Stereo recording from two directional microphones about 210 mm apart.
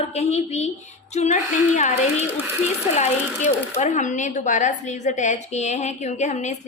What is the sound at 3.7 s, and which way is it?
A woman's voice, 35° left (ahead or behind).